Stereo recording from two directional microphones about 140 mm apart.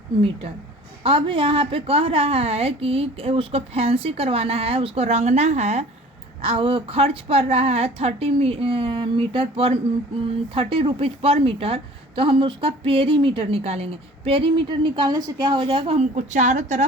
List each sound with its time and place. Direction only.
0.2 s a woman's voice: 40° right (ahead or behind)
6.4 s a woman's voice: 40° right (ahead or behind)
16.1 s a woman's voice: 60° right (ahead or behind)